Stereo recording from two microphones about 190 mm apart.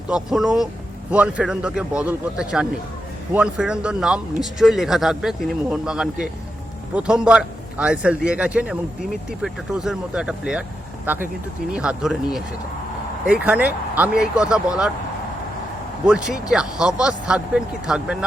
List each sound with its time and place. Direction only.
0.1 s a man's voice: 5° right (ahead or behind)
16.0 s a man's voice: 5° right (ahead or behind)